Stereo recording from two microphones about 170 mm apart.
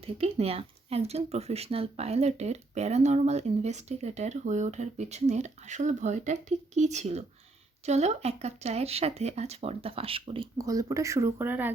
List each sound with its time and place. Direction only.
0.0 s speech: 35° right (ahead or behind)
10.6 s speech: 20° right (ahead or behind)